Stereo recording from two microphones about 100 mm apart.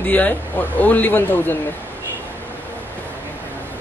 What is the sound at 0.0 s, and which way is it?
Speech, 15° left (ahead or behind).